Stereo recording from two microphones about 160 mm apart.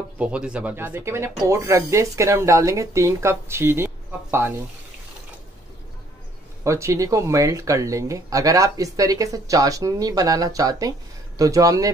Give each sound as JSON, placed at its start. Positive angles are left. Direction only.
{"t": 0.2, "sound": "speech", "side_deg": -5}
{"t": 6.6, "sound": "speech", "side_deg": -20}